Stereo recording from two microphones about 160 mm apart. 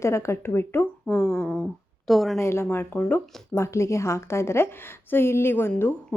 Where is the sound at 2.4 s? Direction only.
15° left (ahead or behind).